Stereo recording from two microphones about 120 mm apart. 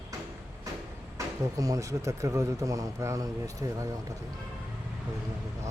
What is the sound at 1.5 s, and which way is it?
A man's voice, 30° right (ahead or behind).